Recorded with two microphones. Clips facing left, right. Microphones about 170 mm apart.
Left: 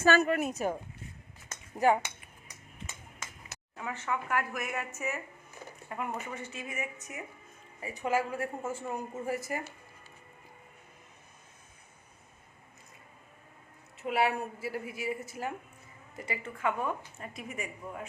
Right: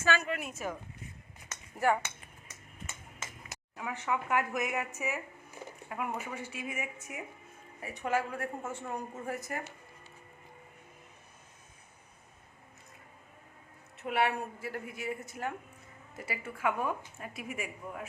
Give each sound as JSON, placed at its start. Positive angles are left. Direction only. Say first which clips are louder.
{"t": 0.0, "sound": "a woman's voice", "louder": "left 6 dB", "side_deg": 40}
{"t": 1.7, "sound": "dishes", "louder": "left 3 dB", "side_deg": 15}
{"t": 3.2, "sound": "speech", "louder": "right 1 dB", "side_deg": -10}
{"t": 7.8, "sound": "a woman's voice", "louder": "left 2 dB", "side_deg": 0}
{"t": 14.0, "sound": "a woman's voice", "louder": "left 1 dB", "side_deg": 5}